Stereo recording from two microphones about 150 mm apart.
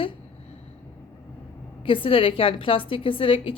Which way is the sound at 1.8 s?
35° left (ahead or behind).